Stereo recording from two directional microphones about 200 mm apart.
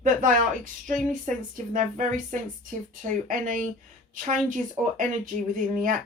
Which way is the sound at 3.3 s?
45° right (ahead or behind).